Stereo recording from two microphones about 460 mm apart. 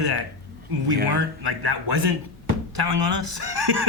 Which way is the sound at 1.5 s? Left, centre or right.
Right.